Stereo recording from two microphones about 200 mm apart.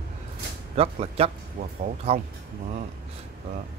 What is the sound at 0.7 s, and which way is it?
Speech, 30° right (ahead or behind).